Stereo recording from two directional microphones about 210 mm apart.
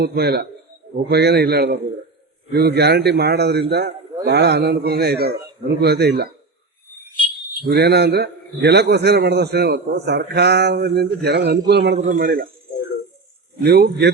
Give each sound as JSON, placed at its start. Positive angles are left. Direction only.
{"t": 0.0, "sound": "a man's voice", "side_deg": -50}
{"t": 7.6, "sound": "a man's voice", "side_deg": -50}
{"t": 11.9, "sound": "a man's voice", "side_deg": -35}
{"t": 13.6, "sound": "a man's voice", "side_deg": -50}